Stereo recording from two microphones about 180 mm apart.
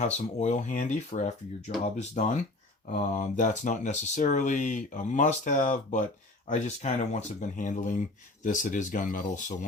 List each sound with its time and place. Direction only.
0.0 s speech: 40° left (ahead or behind)